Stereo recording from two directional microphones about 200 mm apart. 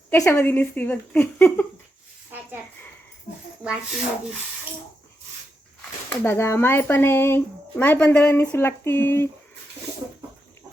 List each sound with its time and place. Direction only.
0.1 s speech: 10° left (ahead or behind)
2.3 s a woman's voice: 10° right (ahead or behind)
3.6 s speech: 5° right (ahead or behind)
6.2 s speech: 10° left (ahead or behind)